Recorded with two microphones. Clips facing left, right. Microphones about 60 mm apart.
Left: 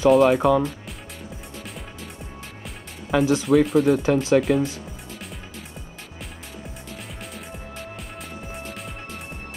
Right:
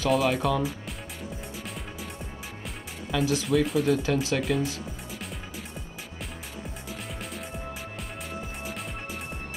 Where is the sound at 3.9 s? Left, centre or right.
Left.